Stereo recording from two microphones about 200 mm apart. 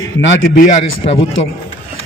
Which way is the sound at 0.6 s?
35° left (ahead or behind).